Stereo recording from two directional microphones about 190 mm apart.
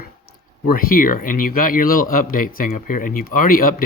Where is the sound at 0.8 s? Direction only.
50° left (ahead or behind).